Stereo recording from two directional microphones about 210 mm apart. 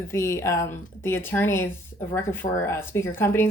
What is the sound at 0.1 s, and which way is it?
A woman's voice, 15° left (ahead or behind).